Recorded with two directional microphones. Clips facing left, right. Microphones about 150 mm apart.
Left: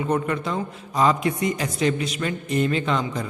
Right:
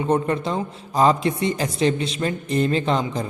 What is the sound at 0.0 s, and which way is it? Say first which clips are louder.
A man's voice: right 3 dB; 30° right (ahead or behind).